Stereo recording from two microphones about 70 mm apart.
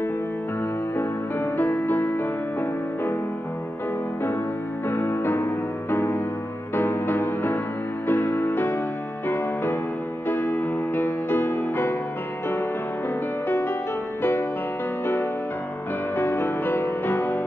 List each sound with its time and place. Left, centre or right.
0.9 s music: left
4.8 s music: left
10.2 s music: left
13.5 s music: left
16.2 s music: left